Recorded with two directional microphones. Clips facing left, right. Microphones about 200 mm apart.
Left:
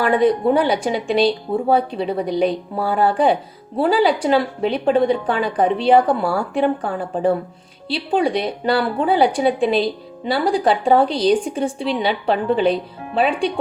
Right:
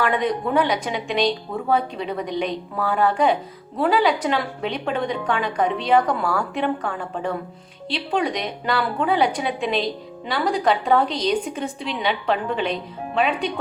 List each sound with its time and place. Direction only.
0.0 s speech: 30° left (ahead or behind)